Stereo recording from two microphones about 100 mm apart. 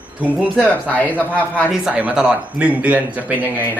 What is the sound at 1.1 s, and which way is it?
Speech, 15° left (ahead or behind).